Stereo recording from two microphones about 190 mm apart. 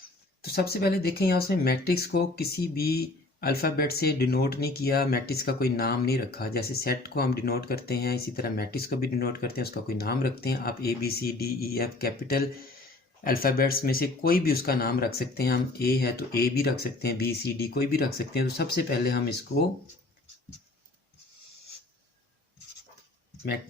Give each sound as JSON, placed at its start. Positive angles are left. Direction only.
{"t": 0.4, "sound": "speech", "side_deg": 55}